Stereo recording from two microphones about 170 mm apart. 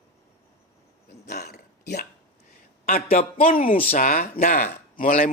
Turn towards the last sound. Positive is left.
turn(degrees=55)  # may be behind; listen again after turning